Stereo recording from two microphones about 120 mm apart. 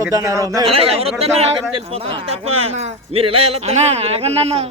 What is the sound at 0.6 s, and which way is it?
A man's voice, 55° right (ahead or behind).